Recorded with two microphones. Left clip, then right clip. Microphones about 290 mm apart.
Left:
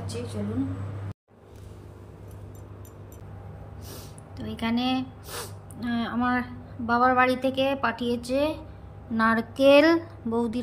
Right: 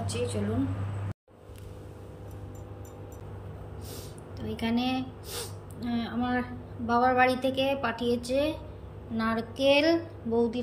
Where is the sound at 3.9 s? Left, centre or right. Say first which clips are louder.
Even; centre.